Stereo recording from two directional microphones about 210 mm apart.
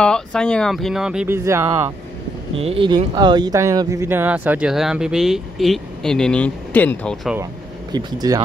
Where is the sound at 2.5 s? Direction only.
25° right (ahead or behind); by 7.2 s 10° left (ahead or behind).